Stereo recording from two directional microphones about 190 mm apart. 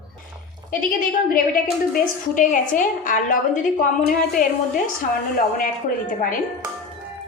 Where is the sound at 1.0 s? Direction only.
45° left (ahead or behind).